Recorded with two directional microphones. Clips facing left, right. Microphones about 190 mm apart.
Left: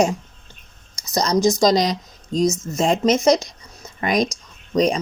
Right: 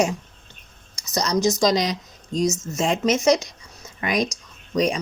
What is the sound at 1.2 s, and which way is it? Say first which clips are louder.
Speech: left 3 dB; 45° left (ahead or behind).